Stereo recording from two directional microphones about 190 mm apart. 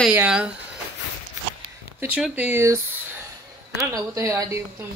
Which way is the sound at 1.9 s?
10° right (ahead or behind).